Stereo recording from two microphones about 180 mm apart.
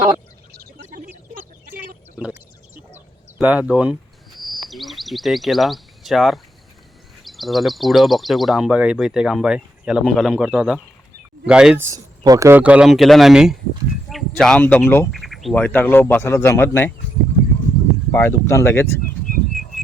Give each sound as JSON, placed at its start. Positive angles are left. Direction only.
{"t": 0.9, "sound": "a sound", "side_deg": -45}
{"t": 2.7, "sound": "bird", "side_deg": -10}
{"t": 4.4, "sound": "a sound", "side_deg": 0}
{"t": 7.3, "sound": "speech", "side_deg": 0}
{"t": 11.9, "sound": "speech", "side_deg": -20}
{"t": 15.1, "sound": "speech", "side_deg": 0}
{"t": 18.1, "sound": "speech", "side_deg": 15}
{"t": 19.3, "sound": "bird", "side_deg": 50}